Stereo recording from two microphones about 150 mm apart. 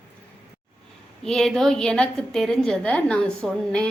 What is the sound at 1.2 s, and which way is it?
A woman's voice, 5° left (ahead or behind).